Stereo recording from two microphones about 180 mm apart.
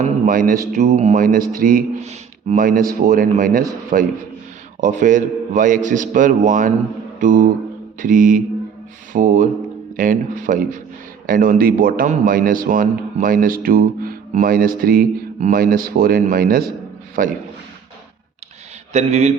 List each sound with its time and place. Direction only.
0.0 s a sound: 50° right (ahead or behind)
0.8 s a man's voice: 40° right (ahead or behind)
18.9 s a man's voice: 35° right (ahead or behind)